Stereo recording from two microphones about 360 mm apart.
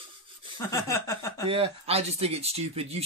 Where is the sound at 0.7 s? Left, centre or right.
Centre.